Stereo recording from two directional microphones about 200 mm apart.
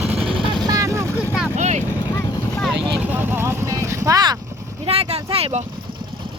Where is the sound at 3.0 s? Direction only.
10° right (ahead or behind).